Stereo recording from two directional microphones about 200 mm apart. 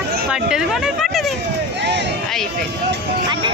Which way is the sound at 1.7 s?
60° right (ahead or behind).